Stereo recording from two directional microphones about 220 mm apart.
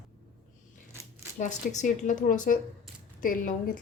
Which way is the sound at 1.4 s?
35° left (ahead or behind).